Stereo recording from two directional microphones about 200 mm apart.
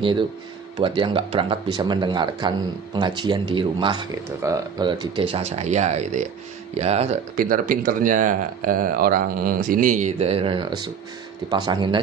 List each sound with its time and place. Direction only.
0.7 s speech: 25° right (ahead or behind)